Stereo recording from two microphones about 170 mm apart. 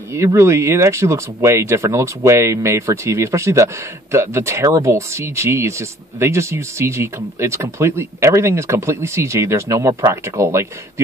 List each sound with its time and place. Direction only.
0.1 s speech: 15° right (ahead or behind)